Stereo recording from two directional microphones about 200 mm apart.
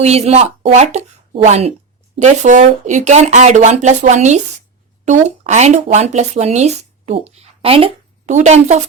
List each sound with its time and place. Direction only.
0.0 s speech: 30° right (ahead or behind)